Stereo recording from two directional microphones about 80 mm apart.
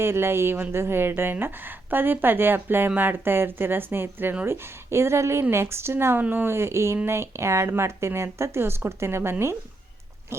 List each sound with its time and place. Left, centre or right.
0.0 s a woman's voice: right